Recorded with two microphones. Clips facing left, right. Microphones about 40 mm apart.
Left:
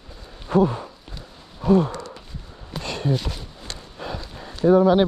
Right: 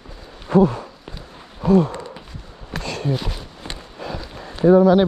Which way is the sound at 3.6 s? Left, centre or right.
Right.